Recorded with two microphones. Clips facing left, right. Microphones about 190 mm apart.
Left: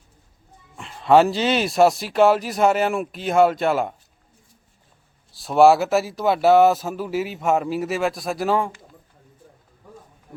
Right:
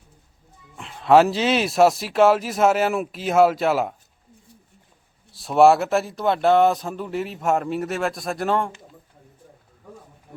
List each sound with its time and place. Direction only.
0.8 s speech: centre (ahead or behind)
5.3 s speech: centre (ahead or behind)